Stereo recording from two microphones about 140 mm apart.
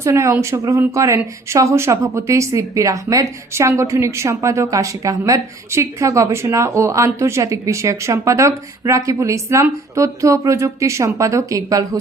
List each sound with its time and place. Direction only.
0.0 s speech: 20° right (ahead or behind)